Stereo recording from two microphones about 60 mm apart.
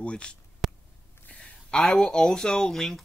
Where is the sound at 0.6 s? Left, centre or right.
Centre.